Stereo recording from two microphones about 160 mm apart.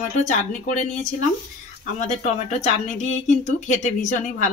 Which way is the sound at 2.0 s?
45° left (ahead or behind).